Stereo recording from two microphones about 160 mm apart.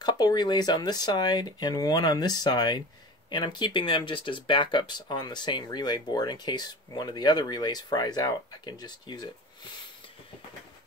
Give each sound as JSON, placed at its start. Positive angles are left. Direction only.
{"t": 0.0, "sound": "speech", "side_deg": 25}